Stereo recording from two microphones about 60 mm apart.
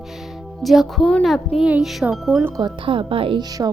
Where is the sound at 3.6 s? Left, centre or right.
Right.